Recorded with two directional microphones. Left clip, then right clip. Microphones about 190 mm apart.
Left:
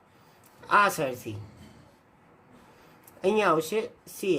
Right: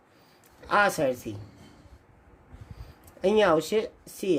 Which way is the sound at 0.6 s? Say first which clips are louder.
Even; 15° right (ahead or behind).